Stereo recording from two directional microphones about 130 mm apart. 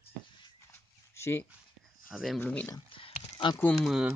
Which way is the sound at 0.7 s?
20° left (ahead or behind).